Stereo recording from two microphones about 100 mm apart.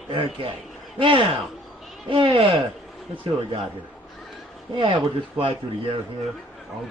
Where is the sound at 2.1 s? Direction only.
60° right (ahead or behind).